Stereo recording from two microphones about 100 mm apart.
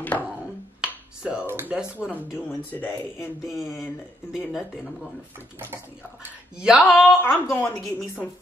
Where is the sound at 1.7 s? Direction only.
10° right (ahead or behind).